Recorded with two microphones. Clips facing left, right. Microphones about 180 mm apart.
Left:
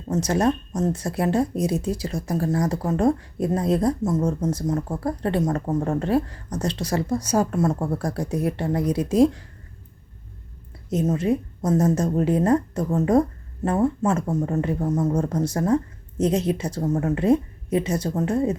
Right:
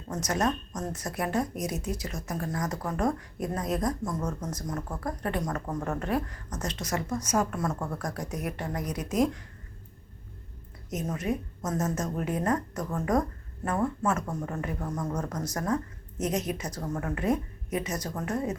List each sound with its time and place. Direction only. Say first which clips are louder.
0.1 s speech: left 7 dB; 30° left (ahead or behind)
10.8 s speech: left 9 dB; 30° left (ahead or behind)